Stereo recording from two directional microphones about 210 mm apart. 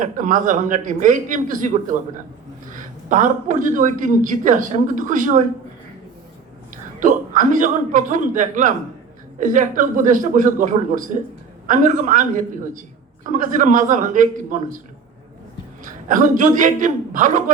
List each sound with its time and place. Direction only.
0.0 s speech: 40° right (ahead or behind)
7.0 s speech: 40° right (ahead or behind)
15.8 s speech: 40° right (ahead or behind)